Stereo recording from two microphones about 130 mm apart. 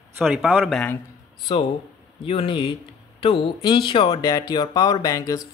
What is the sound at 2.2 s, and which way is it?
Speech, 45° left (ahead or behind).